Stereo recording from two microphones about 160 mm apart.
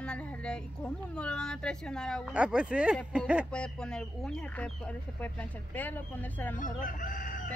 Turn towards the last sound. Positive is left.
turn(degrees=55)  # may be behind; listen again after turning